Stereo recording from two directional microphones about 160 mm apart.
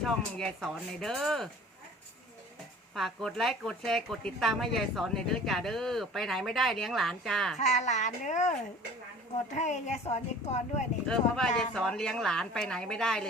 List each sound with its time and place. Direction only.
0.0 s speech: centre (ahead or behind)
2.9 s speech: centre (ahead or behind)
7.6 s speech: 45° left (ahead or behind)
9.6 s speech: 45° left (ahead or behind)
11.1 s speech: 5° left (ahead or behind)